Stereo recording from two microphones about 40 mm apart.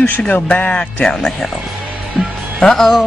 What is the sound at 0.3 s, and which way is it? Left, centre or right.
Speech, left.